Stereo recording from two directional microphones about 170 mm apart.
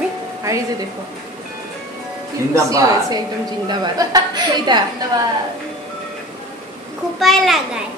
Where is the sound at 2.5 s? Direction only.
20° right (ahead or behind).